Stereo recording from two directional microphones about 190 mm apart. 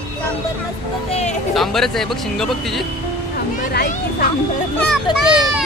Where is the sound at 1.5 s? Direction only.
Centre (ahead or behind).